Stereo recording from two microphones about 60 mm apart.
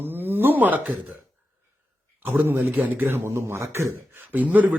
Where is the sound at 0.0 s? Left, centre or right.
Right.